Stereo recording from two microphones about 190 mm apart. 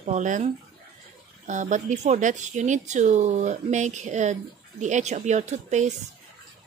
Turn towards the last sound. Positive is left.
turn(degrees=-40)  # may be behind; listen again after turning